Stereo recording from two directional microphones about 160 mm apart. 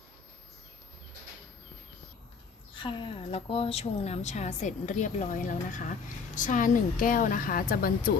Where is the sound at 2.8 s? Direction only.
35° left (ahead or behind).